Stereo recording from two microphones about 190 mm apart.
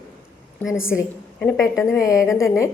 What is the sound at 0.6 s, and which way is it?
Speech, 5° right (ahead or behind).